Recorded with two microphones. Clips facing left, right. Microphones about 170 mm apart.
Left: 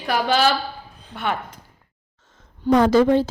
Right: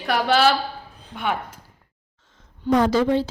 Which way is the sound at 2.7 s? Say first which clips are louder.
Left 3 dB; 65° left (ahead or behind).